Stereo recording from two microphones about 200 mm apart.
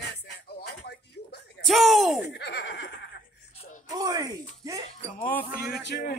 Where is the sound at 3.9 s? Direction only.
20° right (ahead or behind).